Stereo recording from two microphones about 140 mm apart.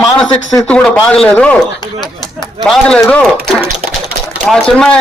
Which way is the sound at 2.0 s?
30° left (ahead or behind).